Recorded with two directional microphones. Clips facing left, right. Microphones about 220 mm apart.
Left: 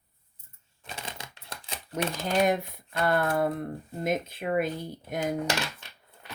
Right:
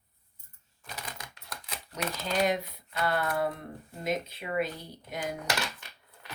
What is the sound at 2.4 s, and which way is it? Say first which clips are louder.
Speech: left 3 dB; 50° left (ahead or behind).